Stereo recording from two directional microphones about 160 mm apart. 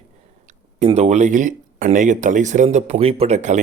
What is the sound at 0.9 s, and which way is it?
Speech, 45° right (ahead or behind).